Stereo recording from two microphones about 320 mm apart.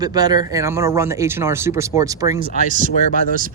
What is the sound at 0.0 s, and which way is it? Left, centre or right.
Speech, centre.